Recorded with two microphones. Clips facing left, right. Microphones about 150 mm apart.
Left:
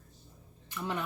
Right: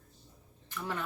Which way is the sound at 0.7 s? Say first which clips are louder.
Left 2 dB; 15° left (ahead or behind).